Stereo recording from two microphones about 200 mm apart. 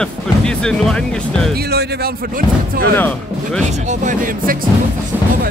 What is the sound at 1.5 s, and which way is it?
Speech, 50° right (ahead or behind).